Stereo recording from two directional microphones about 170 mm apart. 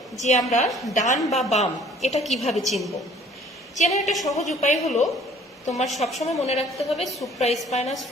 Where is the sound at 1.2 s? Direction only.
Centre (ahead or behind).